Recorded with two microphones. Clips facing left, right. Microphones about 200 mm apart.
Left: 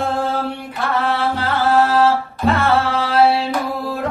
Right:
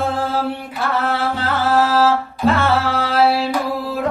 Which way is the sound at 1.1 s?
Centre (ahead or behind).